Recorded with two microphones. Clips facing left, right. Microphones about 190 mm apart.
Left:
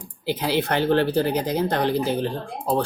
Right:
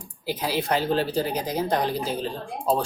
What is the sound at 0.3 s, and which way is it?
Speech, 65° left (ahead or behind).